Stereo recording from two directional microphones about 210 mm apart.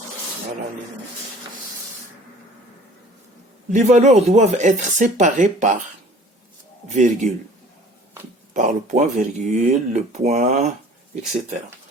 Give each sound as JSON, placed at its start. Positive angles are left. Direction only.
{"t": 3.7, "sound": "speech", "side_deg": -35}
{"t": 6.8, "sound": "speech", "side_deg": -35}
{"t": 8.5, "sound": "speech", "side_deg": -35}